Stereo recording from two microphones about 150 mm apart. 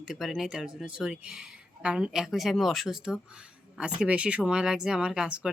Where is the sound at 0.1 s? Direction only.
Centre (ahead or behind).